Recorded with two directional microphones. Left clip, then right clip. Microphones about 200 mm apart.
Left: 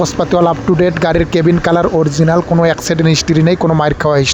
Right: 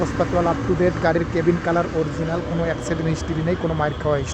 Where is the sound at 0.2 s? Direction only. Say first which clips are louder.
Left 8 dB; 45° left (ahead or behind).